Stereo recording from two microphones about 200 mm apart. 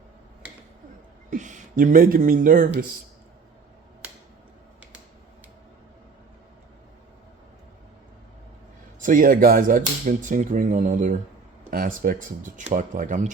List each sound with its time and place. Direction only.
1.3 s speech: 40° right (ahead or behind)
9.0 s speech: 45° right (ahead or behind)